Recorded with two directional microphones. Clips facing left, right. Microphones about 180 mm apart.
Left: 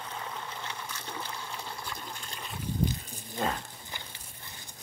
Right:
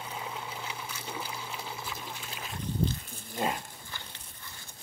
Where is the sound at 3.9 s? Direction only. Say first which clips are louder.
Left 1 dB; 15° left (ahead or behind).